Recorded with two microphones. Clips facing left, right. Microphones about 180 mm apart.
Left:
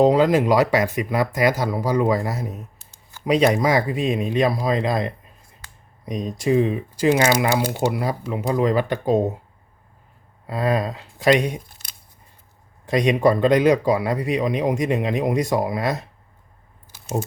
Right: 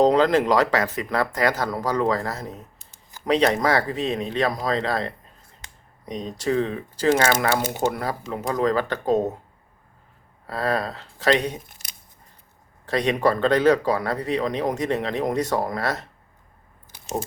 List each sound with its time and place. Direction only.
0.0 s speech: 5° left (ahead or behind)
10.4 s speech: 15° left (ahead or behind)
12.8 s speech: 15° left (ahead or behind)